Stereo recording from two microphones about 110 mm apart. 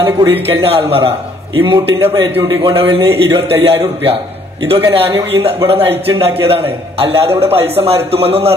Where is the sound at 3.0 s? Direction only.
60° right (ahead or behind).